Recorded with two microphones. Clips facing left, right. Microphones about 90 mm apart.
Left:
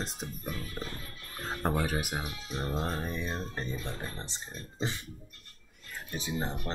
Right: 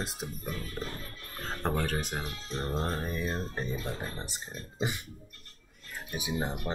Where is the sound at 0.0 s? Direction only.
5° right (ahead or behind).